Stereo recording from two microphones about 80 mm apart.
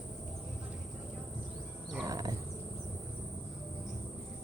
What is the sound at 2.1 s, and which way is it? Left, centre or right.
Wild animals, right.